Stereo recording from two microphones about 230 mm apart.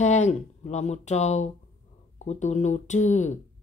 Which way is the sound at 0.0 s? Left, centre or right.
Left.